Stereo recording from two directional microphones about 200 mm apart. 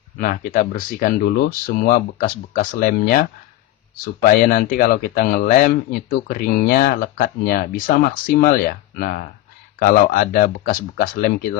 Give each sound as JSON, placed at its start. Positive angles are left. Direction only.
{"t": 0.2, "sound": "speech", "side_deg": 45}